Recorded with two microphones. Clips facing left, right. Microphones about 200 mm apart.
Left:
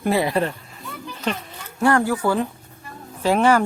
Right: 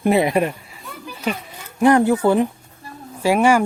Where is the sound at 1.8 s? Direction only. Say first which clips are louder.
Right 5 dB; 20° right (ahead or behind).